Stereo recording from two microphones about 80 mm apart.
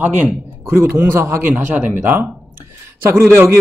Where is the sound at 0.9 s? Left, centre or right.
Right.